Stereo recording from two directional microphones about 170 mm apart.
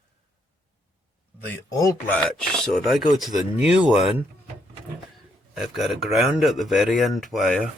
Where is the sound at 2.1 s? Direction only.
5° left (ahead or behind).